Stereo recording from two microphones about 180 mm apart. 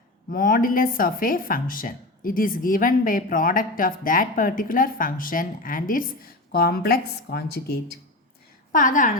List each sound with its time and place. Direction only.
0.3 s speech: 50° left (ahead or behind)
8.7 s speech: 45° left (ahead or behind)